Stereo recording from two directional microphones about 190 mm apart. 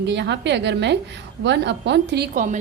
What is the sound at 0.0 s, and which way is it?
A woman's voice, 65° right (ahead or behind).